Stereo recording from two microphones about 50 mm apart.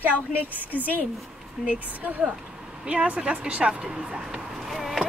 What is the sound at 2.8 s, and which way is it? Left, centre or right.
Speech, right.